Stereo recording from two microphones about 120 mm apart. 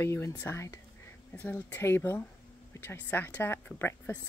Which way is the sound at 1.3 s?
15° left (ahead or behind).